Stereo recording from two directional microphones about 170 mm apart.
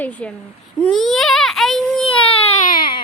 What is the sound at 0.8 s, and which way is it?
Baby cry, centre (ahead or behind).